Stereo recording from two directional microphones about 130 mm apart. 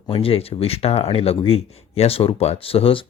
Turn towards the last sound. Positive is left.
turn(degrees=45)  # may be behind; listen again after turning